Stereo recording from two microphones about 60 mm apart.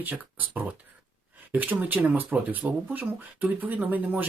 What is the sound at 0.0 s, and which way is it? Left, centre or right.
Speech, right.